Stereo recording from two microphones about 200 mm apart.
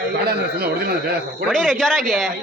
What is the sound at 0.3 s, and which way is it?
Speech, 50° right (ahead or behind).